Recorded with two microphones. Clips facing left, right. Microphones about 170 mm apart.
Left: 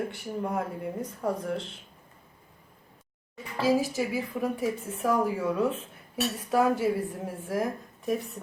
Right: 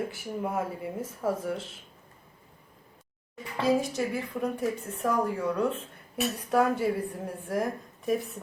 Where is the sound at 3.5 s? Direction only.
Centre (ahead or behind).